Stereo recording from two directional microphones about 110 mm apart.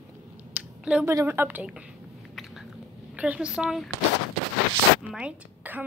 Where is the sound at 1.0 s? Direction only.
25° right (ahead or behind).